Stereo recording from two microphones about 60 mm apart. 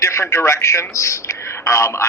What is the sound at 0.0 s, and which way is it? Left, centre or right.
A man's voice, left.